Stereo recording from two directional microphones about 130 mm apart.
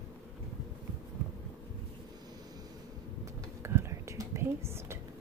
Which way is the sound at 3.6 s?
20° right (ahead or behind).